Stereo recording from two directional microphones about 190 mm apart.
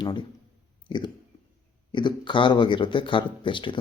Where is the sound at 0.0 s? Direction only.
25° left (ahead or behind).